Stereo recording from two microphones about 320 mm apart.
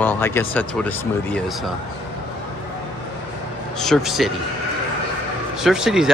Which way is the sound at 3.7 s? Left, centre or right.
Centre.